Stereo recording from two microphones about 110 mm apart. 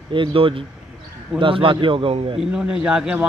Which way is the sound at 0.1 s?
50° right (ahead or behind).